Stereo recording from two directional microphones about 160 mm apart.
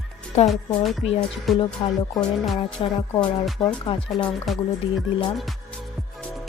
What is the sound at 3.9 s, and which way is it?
Speech, 35° left (ahead or behind).